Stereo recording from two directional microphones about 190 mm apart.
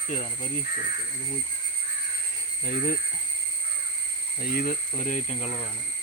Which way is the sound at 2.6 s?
50° left (ahead or behind).